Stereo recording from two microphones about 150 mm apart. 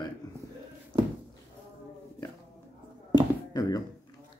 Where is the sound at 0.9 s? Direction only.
35° right (ahead or behind).